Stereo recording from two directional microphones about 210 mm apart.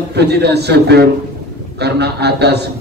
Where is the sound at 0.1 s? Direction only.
50° right (ahead or behind).